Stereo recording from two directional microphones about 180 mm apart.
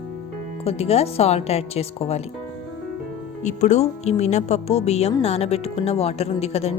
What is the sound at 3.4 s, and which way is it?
A woman's voice, 40° left (ahead or behind).